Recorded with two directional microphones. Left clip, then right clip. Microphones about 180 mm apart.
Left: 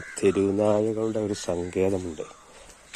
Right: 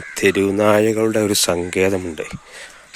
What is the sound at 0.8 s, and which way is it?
Speech, 25° right (ahead or behind).